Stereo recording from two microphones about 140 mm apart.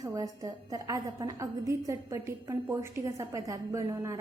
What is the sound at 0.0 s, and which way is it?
A woman's voice, 25° right (ahead or behind).